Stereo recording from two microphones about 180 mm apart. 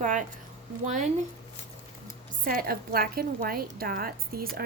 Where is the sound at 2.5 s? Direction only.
55° right (ahead or behind).